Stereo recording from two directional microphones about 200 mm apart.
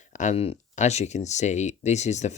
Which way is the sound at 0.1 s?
35° left (ahead or behind).